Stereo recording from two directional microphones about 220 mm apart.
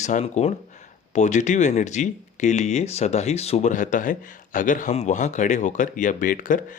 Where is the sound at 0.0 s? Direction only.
30° left (ahead or behind).